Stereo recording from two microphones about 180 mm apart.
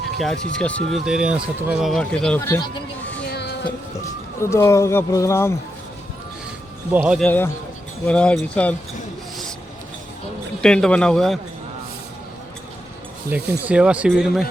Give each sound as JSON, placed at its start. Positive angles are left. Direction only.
{"t": 0.2, "sound": "speech", "side_deg": 5}
{"t": 3.2, "sound": "a sound", "side_deg": 65}
{"t": 4.4, "sound": "a man's voice", "side_deg": 15}
{"t": 6.9, "sound": "speech", "side_deg": -10}
{"t": 7.2, "sound": "a man's voice", "side_deg": 10}
{"t": 10.6, "sound": "speech", "side_deg": 5}
{"t": 13.3, "sound": "speech", "side_deg": -10}